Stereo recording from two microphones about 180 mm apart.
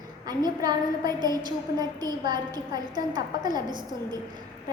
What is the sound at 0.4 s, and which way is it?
A woman's voice, 20° right (ahead or behind).